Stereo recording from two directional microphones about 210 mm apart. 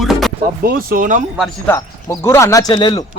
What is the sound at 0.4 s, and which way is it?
Speech, 45° right (ahead or behind).